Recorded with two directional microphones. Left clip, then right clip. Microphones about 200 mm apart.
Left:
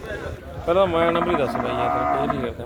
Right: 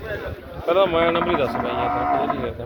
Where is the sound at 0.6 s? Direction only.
5° left (ahead or behind).